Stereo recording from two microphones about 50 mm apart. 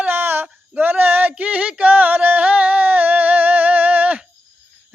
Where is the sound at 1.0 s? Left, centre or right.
Right.